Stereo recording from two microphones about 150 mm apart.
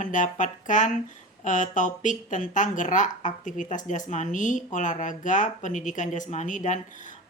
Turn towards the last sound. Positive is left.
turn(degrees=55)  # may be behind; listen again after turning